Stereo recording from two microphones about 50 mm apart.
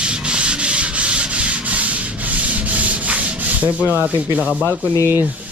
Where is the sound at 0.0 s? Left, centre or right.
Centre.